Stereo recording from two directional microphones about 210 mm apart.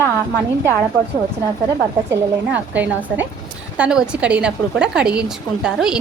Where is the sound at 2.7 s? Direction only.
10° right (ahead or behind).